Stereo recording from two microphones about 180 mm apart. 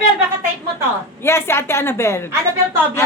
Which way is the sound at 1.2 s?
15° left (ahead or behind).